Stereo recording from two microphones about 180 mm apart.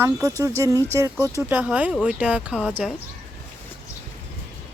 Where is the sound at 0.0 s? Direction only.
15° right (ahead or behind).